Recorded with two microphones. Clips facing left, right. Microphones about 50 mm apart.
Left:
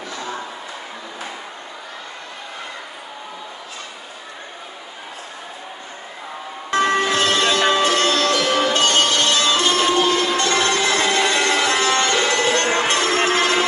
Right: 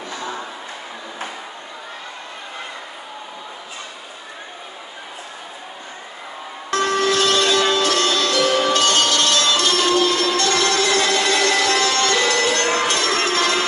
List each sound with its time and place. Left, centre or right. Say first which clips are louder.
6.7 s music: left 1 dB; left